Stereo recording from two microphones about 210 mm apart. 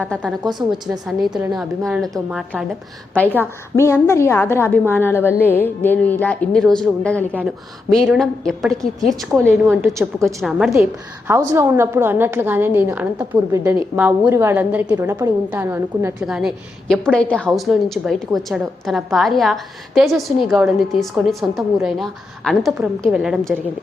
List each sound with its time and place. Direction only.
0.0 s a woman's voice: 5° left (ahead or behind)
3.2 s a woman's voice: 10° left (ahead or behind)
9.3 s a woman's voice: 10° right (ahead or behind)